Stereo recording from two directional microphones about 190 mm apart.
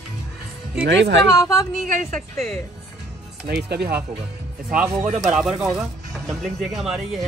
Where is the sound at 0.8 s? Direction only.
70° right (ahead or behind).